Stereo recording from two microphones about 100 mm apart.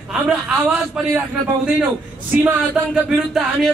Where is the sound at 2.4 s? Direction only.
15° right (ahead or behind).